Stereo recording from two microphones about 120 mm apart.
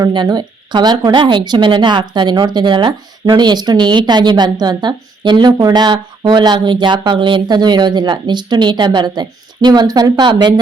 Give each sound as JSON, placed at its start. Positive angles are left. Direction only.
{"t": 0.0, "sound": "speech", "side_deg": -35}